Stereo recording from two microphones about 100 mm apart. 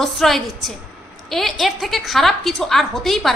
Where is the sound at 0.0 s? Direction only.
Centre (ahead or behind).